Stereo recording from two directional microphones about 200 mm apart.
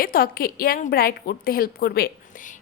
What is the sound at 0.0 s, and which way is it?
A woman's voice, 45° left (ahead or behind).